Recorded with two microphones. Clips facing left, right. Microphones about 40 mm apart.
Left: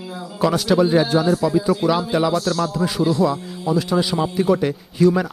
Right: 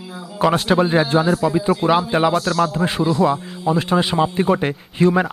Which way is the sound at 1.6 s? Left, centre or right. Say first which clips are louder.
Right 2 dB; right.